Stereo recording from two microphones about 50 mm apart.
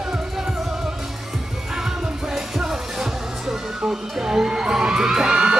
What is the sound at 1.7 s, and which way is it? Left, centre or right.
Music, centre.